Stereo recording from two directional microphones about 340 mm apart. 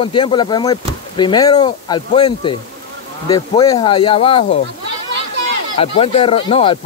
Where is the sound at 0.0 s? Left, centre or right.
Centre.